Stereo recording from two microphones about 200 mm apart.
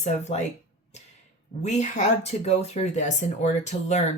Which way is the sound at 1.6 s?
35° left (ahead or behind).